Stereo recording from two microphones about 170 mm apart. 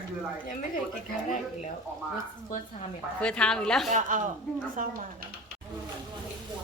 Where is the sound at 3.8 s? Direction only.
45° right (ahead or behind).